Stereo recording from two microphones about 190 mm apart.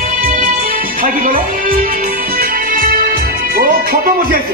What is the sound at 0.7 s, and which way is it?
Music, 50° right (ahead or behind).